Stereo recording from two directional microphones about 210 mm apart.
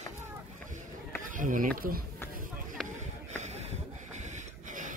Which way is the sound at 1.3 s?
40° right (ahead or behind).